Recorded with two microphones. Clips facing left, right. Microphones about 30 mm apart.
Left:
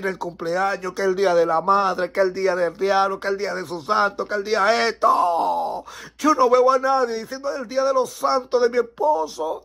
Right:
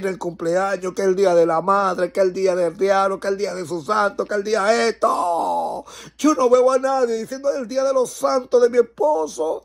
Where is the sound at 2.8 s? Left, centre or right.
Left.